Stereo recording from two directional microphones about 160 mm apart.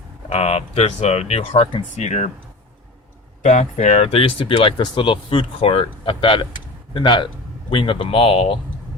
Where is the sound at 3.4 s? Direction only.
45° left (ahead or behind).